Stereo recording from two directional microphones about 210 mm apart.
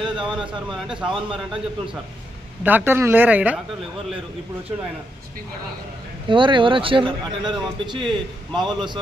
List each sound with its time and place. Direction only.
0.2 s speech: 5° right (ahead or behind)
2.6 s speech: 10° right (ahead or behind)
6.2 s speech: 25° right (ahead or behind)
8.0 s speech: 5° left (ahead or behind)
8.5 s speech: 20° right (ahead or behind)